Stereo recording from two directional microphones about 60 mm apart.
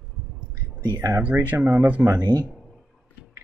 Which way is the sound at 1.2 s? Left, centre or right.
Right.